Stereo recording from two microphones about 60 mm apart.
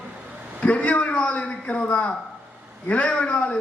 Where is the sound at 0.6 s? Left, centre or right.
Left.